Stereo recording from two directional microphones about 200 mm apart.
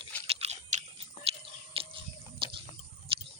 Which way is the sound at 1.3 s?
30° right (ahead or behind).